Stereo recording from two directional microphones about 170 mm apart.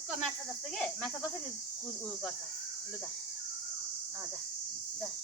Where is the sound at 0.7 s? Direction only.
5° left (ahead or behind).